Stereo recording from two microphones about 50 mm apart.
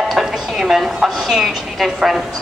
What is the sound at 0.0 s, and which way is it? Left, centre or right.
A woman's voice, centre.